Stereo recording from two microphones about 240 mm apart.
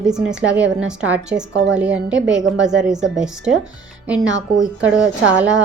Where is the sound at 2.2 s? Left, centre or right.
Right.